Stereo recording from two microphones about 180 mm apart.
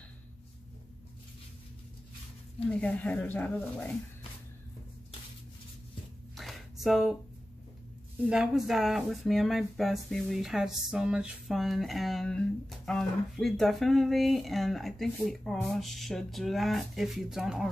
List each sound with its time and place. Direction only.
2.7 s speech: 10° left (ahead or behind)
6.3 s a sound: centre (ahead or behind)
8.3 s speech: 5° right (ahead or behind)